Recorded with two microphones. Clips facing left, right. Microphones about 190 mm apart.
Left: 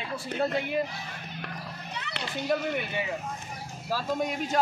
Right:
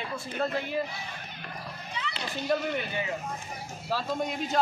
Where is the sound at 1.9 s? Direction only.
65° left (ahead or behind).